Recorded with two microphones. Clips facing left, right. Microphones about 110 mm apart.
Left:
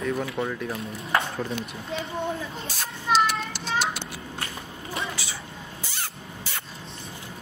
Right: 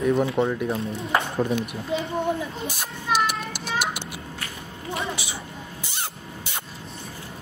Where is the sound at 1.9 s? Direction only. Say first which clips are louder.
Right 5 dB; 15° right (ahead or behind).